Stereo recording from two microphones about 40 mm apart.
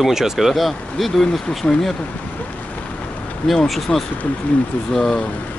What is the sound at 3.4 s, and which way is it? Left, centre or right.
Speech, centre.